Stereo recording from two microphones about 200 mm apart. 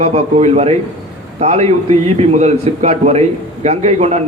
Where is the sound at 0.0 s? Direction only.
30° right (ahead or behind).